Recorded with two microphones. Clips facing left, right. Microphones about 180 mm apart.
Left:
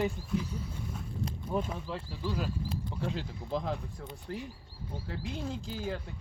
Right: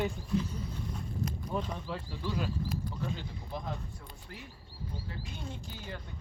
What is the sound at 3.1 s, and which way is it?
Speech, 90° left.